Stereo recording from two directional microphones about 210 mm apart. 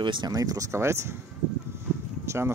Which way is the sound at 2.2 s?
10° right (ahead or behind).